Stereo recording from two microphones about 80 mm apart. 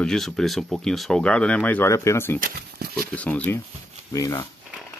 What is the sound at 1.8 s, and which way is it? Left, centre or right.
Speech, left.